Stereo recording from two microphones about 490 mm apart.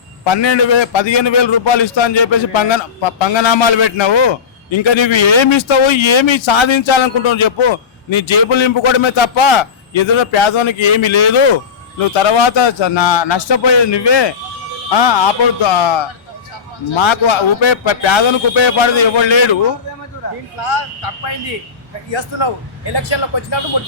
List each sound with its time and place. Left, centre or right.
0.3 s a man's voice: left
20.7 s speech: left
23.0 s a man's voice: left